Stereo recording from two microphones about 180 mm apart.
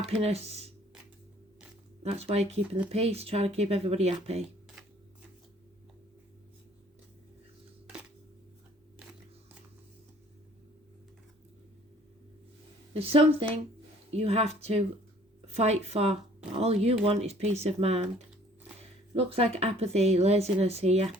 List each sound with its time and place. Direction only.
0.0 s a woman's voice: 35° right (ahead or behind)
2.0 s a woman's voice: 35° right (ahead or behind)
12.9 s a woman's voice: 35° right (ahead or behind)